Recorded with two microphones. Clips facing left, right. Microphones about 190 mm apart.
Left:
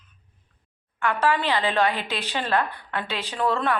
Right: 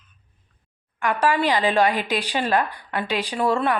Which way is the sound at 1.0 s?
15° right (ahead or behind).